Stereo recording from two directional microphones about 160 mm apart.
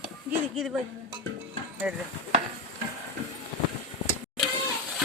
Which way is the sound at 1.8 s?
5° right (ahead or behind).